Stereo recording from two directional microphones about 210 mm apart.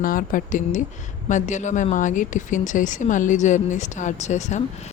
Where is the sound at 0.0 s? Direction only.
40° left (ahead or behind).